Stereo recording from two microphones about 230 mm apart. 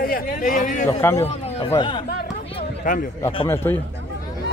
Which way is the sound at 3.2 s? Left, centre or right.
Left.